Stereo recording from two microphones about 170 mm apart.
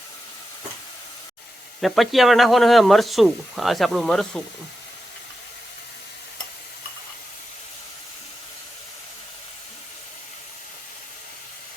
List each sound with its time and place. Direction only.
1.8 s speech: centre (ahead or behind)